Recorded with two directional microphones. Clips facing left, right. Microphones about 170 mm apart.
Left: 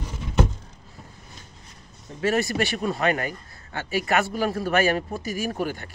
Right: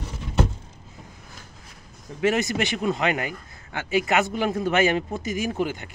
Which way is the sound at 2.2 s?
20° right (ahead or behind).